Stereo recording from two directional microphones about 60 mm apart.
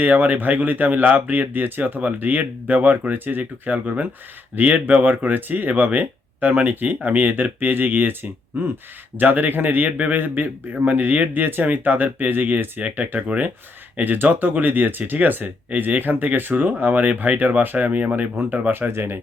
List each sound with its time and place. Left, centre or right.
0.0 s speech: right
18.7 s speech: right